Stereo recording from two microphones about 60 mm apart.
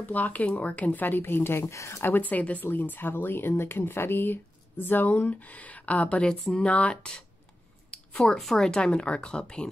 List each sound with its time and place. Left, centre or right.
0.0 s speech: left
1.7 s speech: left
2.0 s speech: left
6.4 s speech: centre
6.7 s speech: left
8.2 s speech: centre